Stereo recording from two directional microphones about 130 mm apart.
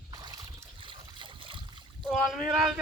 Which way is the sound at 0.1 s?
30° right (ahead or behind).